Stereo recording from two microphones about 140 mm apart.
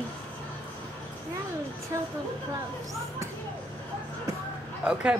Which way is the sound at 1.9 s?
25° right (ahead or behind).